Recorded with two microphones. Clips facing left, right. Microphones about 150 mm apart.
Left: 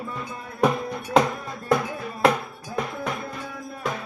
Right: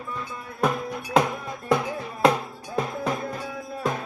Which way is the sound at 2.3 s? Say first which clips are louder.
Even; 25° right (ahead or behind).